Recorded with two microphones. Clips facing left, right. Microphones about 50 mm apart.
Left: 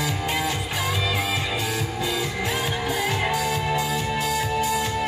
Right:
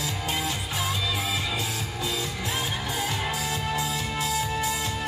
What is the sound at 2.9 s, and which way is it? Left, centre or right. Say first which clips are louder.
Music: left 5 dB; left.